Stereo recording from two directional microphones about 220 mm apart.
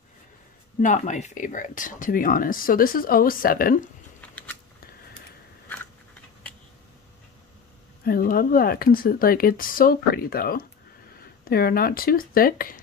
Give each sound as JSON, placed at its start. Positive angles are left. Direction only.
{"t": 0.8, "sound": "speech", "side_deg": 35}
{"t": 4.2, "sound": "a sound", "side_deg": 5}
{"t": 8.0, "sound": "speech", "side_deg": 40}